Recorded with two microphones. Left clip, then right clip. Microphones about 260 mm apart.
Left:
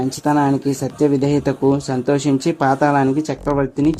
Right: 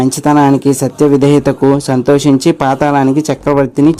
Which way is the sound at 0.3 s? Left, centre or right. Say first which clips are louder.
Right 8 dB; right.